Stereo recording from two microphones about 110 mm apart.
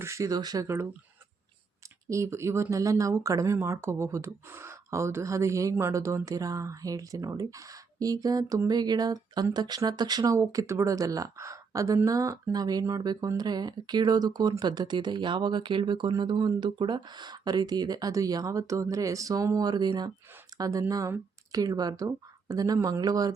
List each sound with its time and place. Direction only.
0.0 s speech: 25° right (ahead or behind)
2.0 s speech: 25° right (ahead or behind)